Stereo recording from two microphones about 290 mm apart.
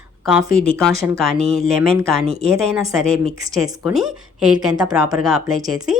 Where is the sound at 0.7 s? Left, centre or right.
Centre.